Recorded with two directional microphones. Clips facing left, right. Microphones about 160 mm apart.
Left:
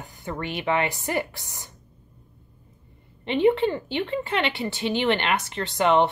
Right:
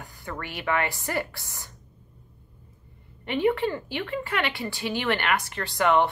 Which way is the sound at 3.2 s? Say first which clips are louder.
Left 4 dB; 25° left (ahead or behind).